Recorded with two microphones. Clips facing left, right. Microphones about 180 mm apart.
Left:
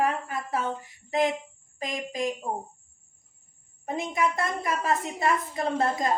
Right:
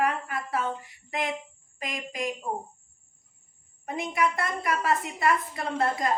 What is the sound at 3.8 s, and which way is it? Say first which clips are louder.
A woman's voice: even; 25° left (ahead or behind).